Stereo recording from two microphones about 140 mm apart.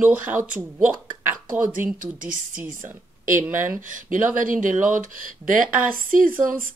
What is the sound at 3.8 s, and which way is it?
Speech, 70° right (ahead or behind).